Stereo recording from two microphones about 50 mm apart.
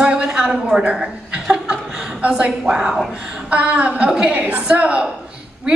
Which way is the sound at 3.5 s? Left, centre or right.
Right.